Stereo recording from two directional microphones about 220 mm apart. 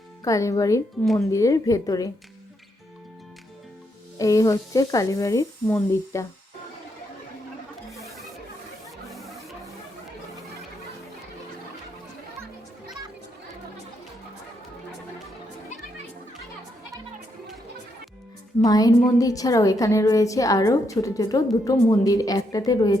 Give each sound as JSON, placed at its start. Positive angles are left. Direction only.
{"t": 0.3, "sound": "a woman's voice", "side_deg": 15}
{"t": 4.2, "sound": "a woman's voice", "side_deg": 15}
{"t": 18.6, "sound": "a woman's voice", "side_deg": 15}